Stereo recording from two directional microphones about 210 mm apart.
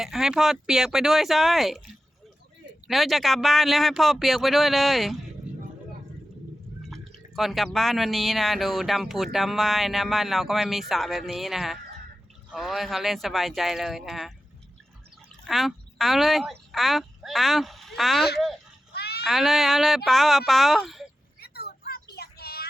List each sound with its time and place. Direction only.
0.0 s speech: centre (ahead or behind)
2.8 s speech: centre (ahead or behind)
6.9 s speech: centre (ahead or behind)
15.4 s speech: centre (ahead or behind)
18.9 s a sound: 50° left (ahead or behind)
19.3 s speech: centre (ahead or behind)
21.4 s a sound: 50° left (ahead or behind)